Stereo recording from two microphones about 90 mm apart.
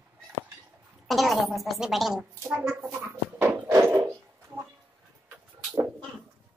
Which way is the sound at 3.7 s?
30° right (ahead or behind).